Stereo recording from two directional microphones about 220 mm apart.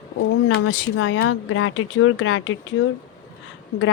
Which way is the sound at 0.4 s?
70° left (ahead or behind).